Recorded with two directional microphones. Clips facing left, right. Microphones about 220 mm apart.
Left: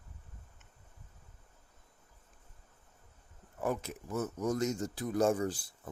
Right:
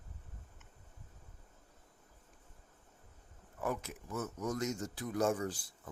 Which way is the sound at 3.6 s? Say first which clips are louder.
Left 3 dB; 30° left (ahead or behind).